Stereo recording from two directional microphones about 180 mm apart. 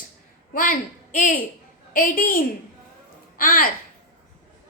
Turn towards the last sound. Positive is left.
turn(degrees=55)  # may be behind; listen again after turning